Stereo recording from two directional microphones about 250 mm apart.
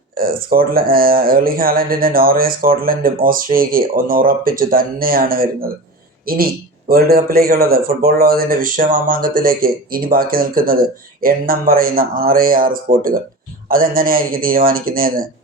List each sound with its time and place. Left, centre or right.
0.2 s speech: right